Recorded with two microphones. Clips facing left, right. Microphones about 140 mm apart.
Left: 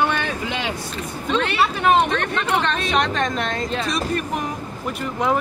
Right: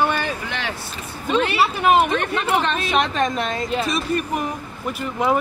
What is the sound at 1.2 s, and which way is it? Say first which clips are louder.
Speech: right 2 dB; 5° right (ahead or behind).